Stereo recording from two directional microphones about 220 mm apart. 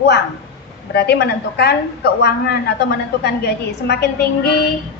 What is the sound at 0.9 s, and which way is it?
A woman's voice, 45° left (ahead or behind).